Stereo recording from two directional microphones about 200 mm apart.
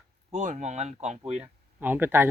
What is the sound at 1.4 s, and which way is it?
Speech, 10° right (ahead or behind).